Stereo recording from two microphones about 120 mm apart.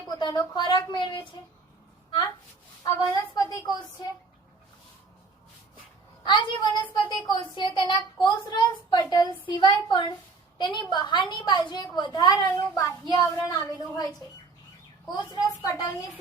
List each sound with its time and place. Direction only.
0.2 s a woman's voice: 40° left (ahead or behind)
2.8 s a woman's voice: 30° left (ahead or behind)
6.2 s a woman's voice: 45° left (ahead or behind)
15.3 s a woman's voice: 35° left (ahead or behind)